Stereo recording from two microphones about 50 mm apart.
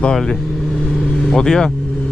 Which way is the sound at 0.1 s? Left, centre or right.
Centre.